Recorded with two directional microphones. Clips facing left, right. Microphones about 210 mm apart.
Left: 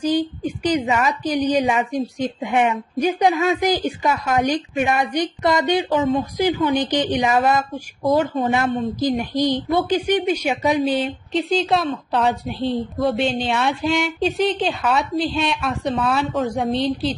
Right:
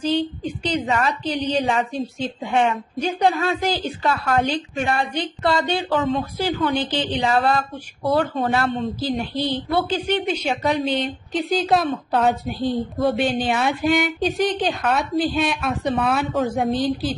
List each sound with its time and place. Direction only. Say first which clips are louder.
0.0 s a woman's voice: left 2 dB; 10° left (ahead or behind)
10.8 s a woman's voice: left 3 dB; centre (ahead or behind)